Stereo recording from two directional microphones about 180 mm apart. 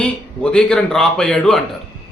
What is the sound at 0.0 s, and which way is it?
A man's voice, 5° left (ahead or behind).